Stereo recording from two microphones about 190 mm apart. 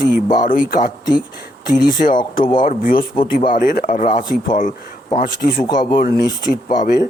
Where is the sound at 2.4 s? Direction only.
25° left (ahead or behind).